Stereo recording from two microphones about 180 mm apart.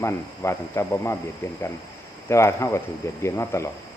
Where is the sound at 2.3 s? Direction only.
15° left (ahead or behind).